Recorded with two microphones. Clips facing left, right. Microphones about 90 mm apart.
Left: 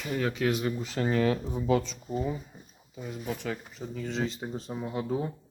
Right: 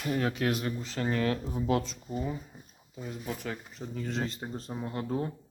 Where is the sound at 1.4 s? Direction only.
5° right (ahead or behind).